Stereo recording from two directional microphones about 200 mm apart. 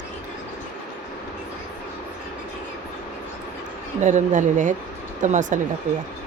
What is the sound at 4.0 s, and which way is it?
Speech, 35° right (ahead or behind).